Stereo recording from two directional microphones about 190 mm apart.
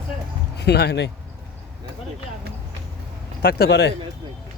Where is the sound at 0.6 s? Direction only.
60° left (ahead or behind).